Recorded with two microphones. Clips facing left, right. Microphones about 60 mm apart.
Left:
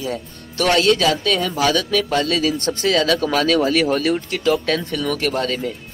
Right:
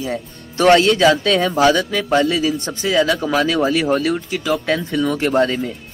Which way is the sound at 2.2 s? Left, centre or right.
Centre.